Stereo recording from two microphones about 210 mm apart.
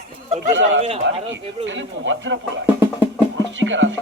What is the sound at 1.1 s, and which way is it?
Speech, 55° right (ahead or behind).